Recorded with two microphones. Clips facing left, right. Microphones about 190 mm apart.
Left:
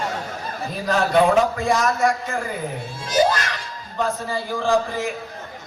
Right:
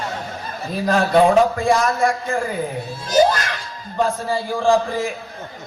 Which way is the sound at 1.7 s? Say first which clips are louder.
Right 2 dB; 30° right (ahead or behind).